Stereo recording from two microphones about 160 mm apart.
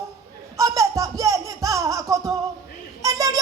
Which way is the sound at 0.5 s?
20° right (ahead or behind).